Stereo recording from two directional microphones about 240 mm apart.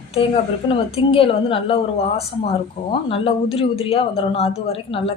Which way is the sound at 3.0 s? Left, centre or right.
Left.